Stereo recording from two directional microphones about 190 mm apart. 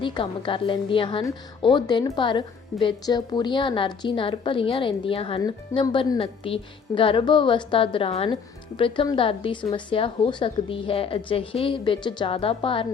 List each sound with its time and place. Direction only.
0.0 s a woman's voice: 25° left (ahead or behind)